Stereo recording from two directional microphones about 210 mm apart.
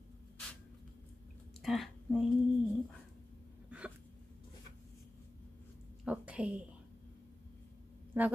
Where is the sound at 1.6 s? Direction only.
Centre (ahead or behind).